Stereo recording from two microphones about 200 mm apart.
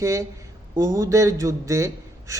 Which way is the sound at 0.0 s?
15° right (ahead or behind).